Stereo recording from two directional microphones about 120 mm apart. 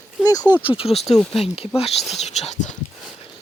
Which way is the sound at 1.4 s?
55° left (ahead or behind).